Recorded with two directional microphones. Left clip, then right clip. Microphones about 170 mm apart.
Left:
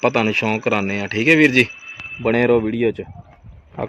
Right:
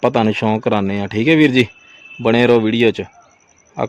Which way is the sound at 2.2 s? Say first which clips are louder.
Right 4 dB; 90° right.